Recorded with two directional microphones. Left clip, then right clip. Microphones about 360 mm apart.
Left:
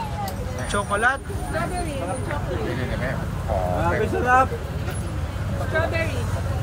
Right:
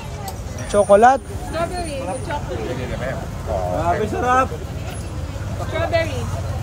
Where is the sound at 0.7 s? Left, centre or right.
Centre.